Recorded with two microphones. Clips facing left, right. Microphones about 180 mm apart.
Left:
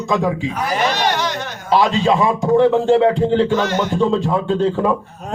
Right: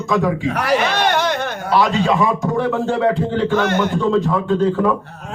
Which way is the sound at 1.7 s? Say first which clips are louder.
Left 1 dB; 20° left (ahead or behind).